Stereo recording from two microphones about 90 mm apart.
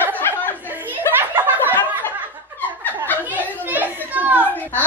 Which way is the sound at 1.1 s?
25° right (ahead or behind).